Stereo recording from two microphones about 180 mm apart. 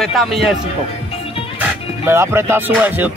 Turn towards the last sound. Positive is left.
turn(degrees=-10)  # may be behind; listen again after turning